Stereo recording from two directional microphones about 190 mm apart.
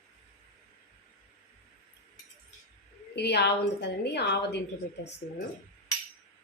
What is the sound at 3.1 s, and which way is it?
A woman's voice, 60° left (ahead or behind).